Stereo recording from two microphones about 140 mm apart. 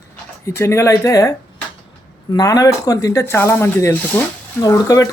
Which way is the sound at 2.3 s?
25° left (ahead or behind).